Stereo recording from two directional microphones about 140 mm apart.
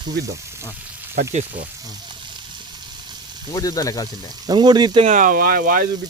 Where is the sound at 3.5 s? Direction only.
25° left (ahead or behind).